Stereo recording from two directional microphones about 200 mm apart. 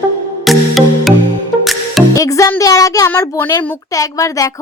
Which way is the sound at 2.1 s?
15° left (ahead or behind).